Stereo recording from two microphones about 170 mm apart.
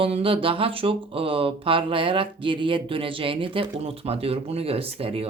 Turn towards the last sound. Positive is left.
turn(degrees=-35)  # may be behind; listen again after turning